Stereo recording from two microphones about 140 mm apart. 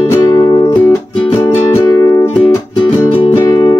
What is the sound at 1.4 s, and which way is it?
Music, 20° left (ahead or behind).